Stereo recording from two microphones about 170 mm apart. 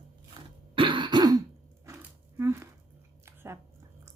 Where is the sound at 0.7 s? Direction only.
30° right (ahead or behind).